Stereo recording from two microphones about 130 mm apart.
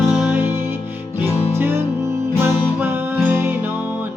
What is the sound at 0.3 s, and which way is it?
Music, 15° right (ahead or behind).